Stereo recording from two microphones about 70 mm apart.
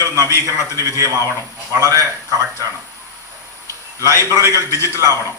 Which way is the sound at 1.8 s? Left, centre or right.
Right.